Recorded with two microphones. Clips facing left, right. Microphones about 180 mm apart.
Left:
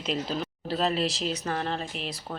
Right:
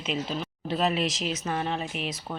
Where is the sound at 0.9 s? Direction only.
35° left (ahead or behind).